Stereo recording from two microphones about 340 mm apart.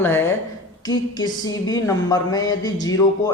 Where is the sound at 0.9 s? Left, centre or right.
Centre.